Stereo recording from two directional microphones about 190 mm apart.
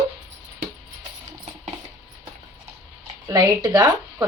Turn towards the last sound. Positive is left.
turn(degrees=-20)  # may be behind; listen again after turning